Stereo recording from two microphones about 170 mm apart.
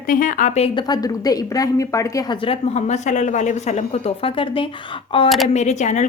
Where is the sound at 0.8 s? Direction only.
20° left (ahead or behind).